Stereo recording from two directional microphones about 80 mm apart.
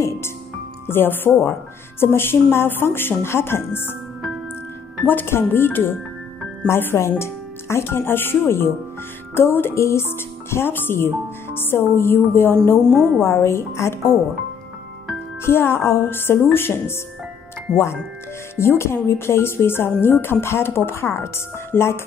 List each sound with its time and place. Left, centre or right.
0.8 s speech: left
5.0 s speech: left
12.9 s a woman's voice: right
13.2 s speech: left
15.4 s speech: left
17.7 s speech: centre
18.6 s speech: left